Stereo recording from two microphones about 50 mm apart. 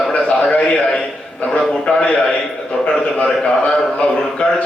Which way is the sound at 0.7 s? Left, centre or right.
Centre.